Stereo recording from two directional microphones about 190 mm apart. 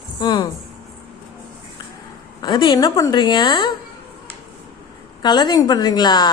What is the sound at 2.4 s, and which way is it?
A woman's voice, 25° left (ahead or behind).